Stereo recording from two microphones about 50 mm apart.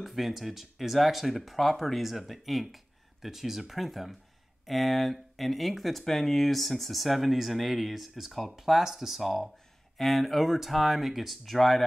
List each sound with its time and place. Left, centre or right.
0.0 s speech: centre